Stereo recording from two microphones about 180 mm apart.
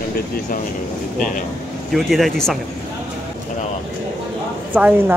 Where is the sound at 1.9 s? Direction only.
Centre (ahead or behind).